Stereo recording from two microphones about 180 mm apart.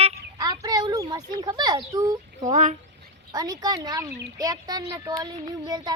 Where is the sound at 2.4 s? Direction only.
40° right (ahead or behind).